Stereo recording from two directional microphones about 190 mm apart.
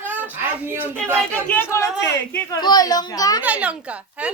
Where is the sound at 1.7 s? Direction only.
15° left (ahead or behind).